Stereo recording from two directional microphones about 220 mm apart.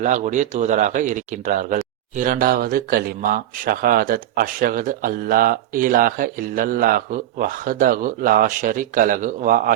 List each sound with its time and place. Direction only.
0.0 s speech: 35° right (ahead or behind)